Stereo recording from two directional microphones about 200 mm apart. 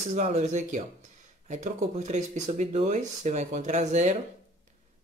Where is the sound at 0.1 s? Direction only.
35° right (ahead or behind).